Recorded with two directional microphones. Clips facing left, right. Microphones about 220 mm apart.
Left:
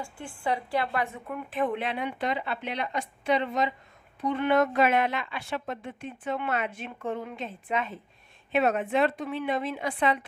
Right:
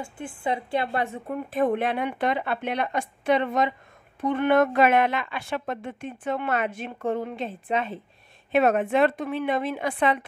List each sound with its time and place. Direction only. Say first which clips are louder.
0.0 s speech: right 3 dB; 20° right (ahead or behind)
8.5 s a woman's voice: right 4 dB; 50° right (ahead or behind)